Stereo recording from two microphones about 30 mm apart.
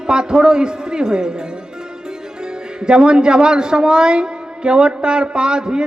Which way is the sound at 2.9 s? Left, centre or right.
Right.